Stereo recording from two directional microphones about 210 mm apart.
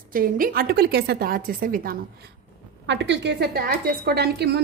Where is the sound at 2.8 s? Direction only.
55° right (ahead or behind).